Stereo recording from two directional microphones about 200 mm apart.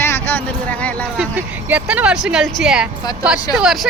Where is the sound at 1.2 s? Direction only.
10° right (ahead or behind).